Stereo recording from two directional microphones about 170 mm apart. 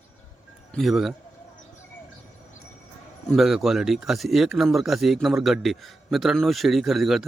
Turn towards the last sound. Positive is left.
turn(degrees=0)  # may be behind; listen again after turning